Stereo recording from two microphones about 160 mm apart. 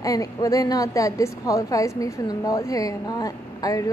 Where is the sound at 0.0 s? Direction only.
20° left (ahead or behind).